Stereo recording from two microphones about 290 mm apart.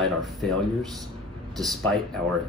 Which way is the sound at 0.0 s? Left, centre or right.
Centre.